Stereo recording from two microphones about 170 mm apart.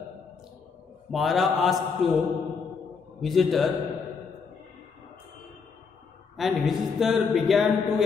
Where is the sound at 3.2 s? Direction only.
Centre (ahead or behind).